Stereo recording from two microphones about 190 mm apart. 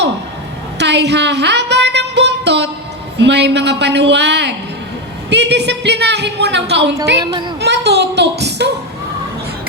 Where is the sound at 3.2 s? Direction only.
65° right (ahead or behind).